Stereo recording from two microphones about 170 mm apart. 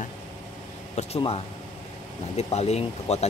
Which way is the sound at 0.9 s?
35° left (ahead or behind).